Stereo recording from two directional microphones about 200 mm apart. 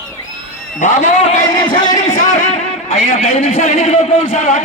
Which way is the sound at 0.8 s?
40° left (ahead or behind).